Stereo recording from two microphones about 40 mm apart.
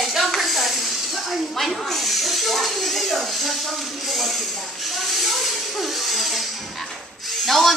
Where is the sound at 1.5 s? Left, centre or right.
Centre.